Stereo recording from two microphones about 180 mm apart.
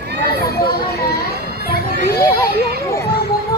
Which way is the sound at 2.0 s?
15° left (ahead or behind).